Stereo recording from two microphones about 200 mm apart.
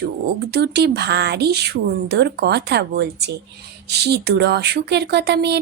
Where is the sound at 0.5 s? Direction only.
55° right (ahead or behind).